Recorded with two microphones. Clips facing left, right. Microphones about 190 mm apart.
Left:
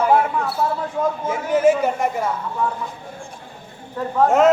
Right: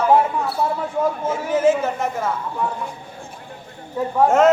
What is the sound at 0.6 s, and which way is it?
Speech, 15° right (ahead or behind).